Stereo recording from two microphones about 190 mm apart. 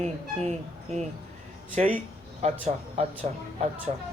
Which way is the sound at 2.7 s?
35° right (ahead or behind).